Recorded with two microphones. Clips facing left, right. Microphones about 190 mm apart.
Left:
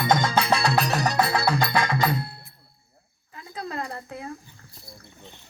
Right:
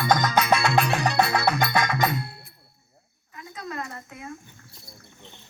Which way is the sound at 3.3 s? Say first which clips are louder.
Left 2 dB; 30° left (ahead or behind).